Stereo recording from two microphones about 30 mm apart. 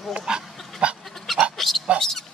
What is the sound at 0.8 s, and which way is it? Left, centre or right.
Goat, right.